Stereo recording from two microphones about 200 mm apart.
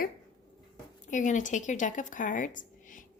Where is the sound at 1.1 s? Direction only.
40° left (ahead or behind).